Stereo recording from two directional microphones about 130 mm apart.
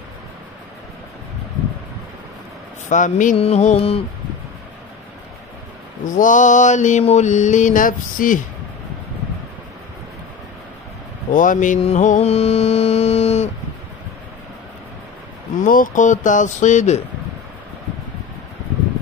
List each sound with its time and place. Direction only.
2.9 s mantra: 75° left (ahead or behind)
3.3 s mantra: 55° left (ahead or behind)
6.0 s mantra: 85° left
11.3 s speech: 85° left
11.8 s mantra: 65° left (ahead or behind)
15.6 s mantra: 90° left; by 17.0 s 65° left (ahead or behind)